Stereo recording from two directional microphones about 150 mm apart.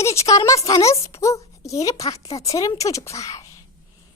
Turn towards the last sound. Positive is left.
turn(degrees=20)  # may be behind; listen again after turning